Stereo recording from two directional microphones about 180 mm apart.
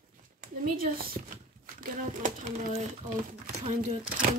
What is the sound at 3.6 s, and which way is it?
Speech, 40° right (ahead or behind).